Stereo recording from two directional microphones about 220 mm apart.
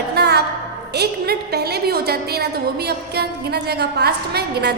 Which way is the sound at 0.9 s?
45° right (ahead or behind).